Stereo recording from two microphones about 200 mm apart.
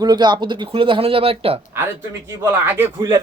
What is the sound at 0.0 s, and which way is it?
Speech, 20° right (ahead or behind).